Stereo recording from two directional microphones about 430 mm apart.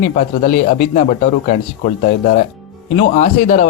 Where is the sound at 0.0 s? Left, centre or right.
Centre.